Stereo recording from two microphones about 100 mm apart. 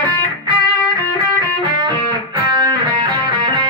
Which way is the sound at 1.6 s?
50° right (ahead or behind).